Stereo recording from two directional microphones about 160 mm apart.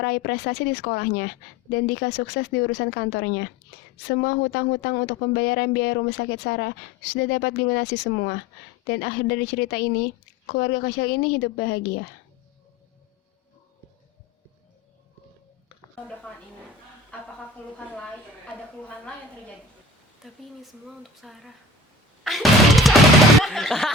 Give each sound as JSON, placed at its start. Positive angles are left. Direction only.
{"t": 0.0, "sound": "speech", "side_deg": 80}
{"t": 20.8, "sound": "speech", "side_deg": 0}
{"t": 22.2, "sound": "music", "side_deg": 0}
{"t": 23.4, "sound": "speech", "side_deg": 0}